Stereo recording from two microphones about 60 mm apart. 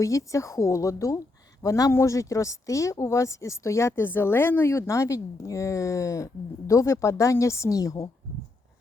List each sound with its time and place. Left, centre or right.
0.0 s a woman's voice: left